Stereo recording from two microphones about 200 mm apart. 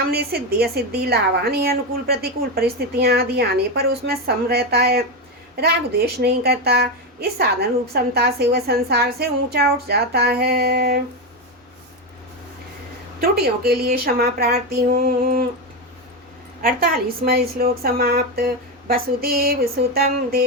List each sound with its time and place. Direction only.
0.1 s a woman's voice: 50° right (ahead or behind)
13.2 s a woman's voice: 50° right (ahead or behind)
16.6 s a woman's voice: 45° right (ahead or behind)